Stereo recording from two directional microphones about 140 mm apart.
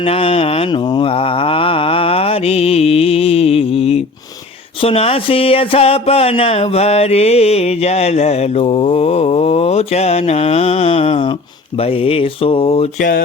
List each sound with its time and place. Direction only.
0.0 s mantra: 40° left (ahead or behind)
4.8 s a sound: 45° left (ahead or behind)
13.0 s speech: 90° left